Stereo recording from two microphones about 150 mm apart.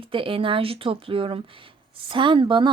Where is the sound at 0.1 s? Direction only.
35° right (ahead or behind).